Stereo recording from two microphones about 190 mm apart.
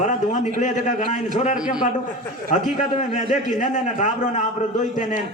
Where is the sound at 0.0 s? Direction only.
40° left (ahead or behind).